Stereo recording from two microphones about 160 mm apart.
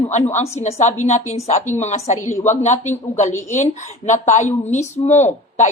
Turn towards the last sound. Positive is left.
turn(degrees=45)  # may be behind; listen again after turning